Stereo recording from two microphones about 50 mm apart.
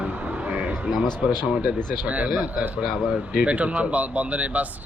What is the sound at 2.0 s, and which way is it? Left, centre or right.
Speech, right.